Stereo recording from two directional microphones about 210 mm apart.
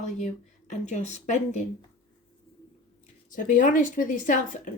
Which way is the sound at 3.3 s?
40° left (ahead or behind).